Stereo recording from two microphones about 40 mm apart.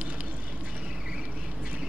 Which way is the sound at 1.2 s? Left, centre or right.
Right.